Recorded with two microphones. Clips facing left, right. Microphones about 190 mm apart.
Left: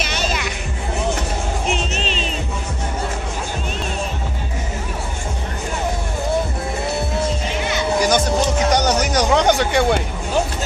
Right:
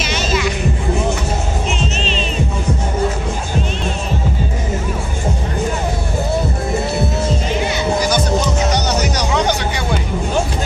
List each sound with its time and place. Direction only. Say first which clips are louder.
8.7 s music: left 1 dB; 50° left (ahead or behind)